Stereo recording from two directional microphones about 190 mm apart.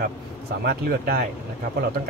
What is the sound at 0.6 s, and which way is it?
Speech, 55° right (ahead or behind).